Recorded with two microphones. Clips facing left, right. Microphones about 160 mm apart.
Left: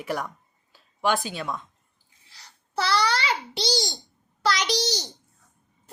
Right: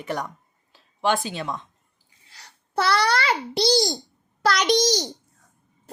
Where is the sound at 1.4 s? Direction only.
20° right (ahead or behind).